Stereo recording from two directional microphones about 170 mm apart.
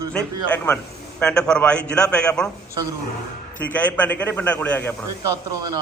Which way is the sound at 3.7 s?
10° left (ahead or behind).